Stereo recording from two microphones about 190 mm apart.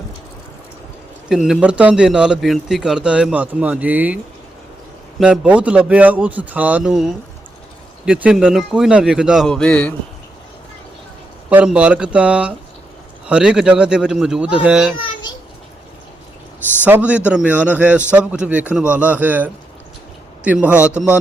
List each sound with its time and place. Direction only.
1.3 s a man's voice: centre (ahead or behind)
5.2 s a man's voice: 5° right (ahead or behind)
11.4 s a man's voice: 5° right (ahead or behind)
14.9 s a sound: 25° left (ahead or behind)
16.8 s a man's voice: 10° right (ahead or behind)